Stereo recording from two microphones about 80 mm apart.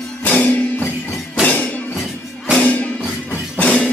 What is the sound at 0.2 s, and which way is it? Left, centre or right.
Music, centre.